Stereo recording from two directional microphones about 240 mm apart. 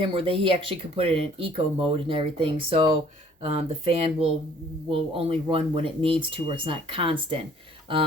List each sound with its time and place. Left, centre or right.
0.1 s speech: right